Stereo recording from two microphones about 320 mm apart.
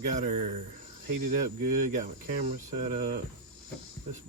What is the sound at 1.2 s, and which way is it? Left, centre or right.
Speech, right.